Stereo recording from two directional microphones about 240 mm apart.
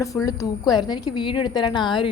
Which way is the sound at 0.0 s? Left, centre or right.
Centre.